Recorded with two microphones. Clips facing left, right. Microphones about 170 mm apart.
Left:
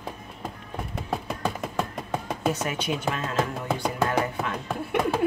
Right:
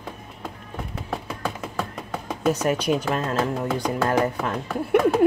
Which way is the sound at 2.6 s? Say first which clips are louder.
Right 6 dB; 40° right (ahead or behind).